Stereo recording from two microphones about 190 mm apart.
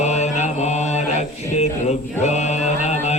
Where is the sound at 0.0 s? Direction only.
35° left (ahead or behind).